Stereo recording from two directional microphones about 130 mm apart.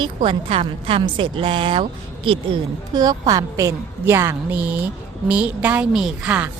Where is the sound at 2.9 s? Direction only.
30° right (ahead or behind); by 6.5 s 10° right (ahead or behind).